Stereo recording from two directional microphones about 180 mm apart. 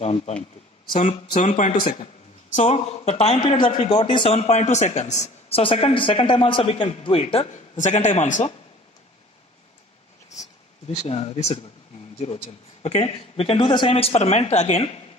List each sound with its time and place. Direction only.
0.0 s speech: 35° left (ahead or behind)
1.8 s speech: 30° left (ahead or behind)
11.0 s speech: 35° left (ahead or behind)